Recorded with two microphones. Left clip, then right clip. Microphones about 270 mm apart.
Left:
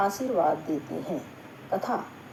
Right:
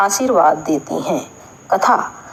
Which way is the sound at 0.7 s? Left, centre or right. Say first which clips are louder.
Right 13 dB; right.